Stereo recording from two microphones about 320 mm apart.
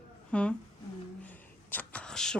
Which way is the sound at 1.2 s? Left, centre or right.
Centre.